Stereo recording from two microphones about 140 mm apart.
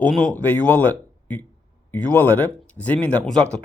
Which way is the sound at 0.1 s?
5° left (ahead or behind).